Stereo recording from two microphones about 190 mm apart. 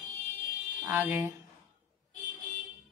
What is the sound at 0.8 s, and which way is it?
Speech, 10° right (ahead or behind).